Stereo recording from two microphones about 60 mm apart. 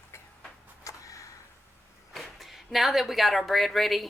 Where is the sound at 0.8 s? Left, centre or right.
Left.